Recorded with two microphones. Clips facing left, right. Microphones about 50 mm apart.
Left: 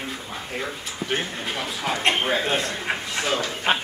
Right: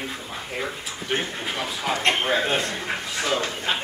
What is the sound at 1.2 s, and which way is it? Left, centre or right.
Speech, centre.